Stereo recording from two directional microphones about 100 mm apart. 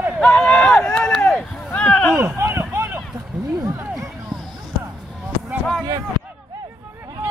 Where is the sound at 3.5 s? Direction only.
30° right (ahead or behind).